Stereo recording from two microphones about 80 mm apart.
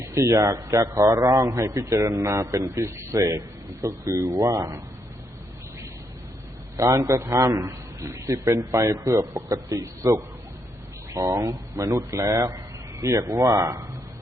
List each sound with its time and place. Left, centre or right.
0.3 s a man's voice: right
6.7 s a man's voice: right
13.6 s a man's voice: right